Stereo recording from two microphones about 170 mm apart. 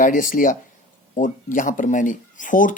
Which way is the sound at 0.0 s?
50° left (ahead or behind).